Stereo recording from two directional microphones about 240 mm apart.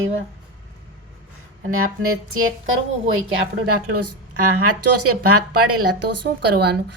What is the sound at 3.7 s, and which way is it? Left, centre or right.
Speech, right.